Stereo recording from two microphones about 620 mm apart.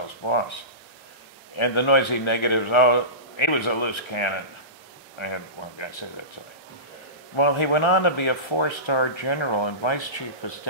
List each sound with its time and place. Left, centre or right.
0.2 s speech: left
1.6 s speech: left
7.3 s speech: left